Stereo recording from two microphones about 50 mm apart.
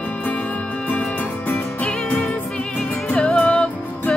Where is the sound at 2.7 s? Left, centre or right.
Left.